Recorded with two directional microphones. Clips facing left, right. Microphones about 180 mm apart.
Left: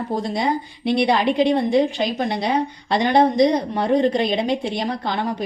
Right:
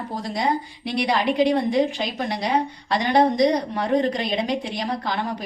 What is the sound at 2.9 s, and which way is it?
Speech, 25° left (ahead or behind).